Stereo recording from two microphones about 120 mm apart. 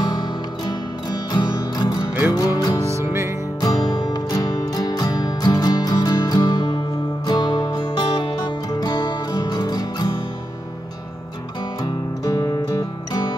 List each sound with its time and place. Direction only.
0.0 s music: 40° left (ahead or behind)
2.9 s music: 25° right (ahead or behind)
3.6 s music: 30° left (ahead or behind)